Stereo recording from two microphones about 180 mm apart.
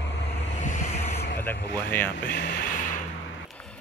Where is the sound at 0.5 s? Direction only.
45° left (ahead or behind).